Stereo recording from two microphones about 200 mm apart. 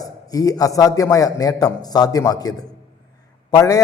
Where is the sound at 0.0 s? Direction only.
20° left (ahead or behind).